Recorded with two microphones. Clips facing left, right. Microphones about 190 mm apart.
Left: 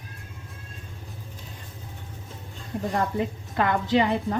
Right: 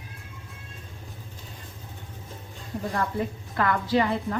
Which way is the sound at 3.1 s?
20° left (ahead or behind).